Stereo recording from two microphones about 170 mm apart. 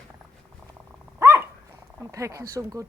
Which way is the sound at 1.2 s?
10° right (ahead or behind).